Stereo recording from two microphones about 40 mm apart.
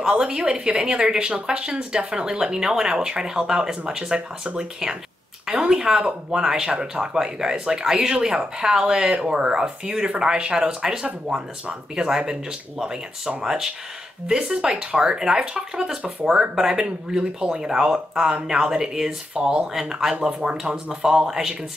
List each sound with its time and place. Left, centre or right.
0.0 s a woman's voice: right
20.2 s a woman's voice: right